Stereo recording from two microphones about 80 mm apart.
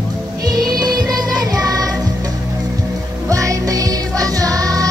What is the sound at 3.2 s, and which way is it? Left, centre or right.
Music, right.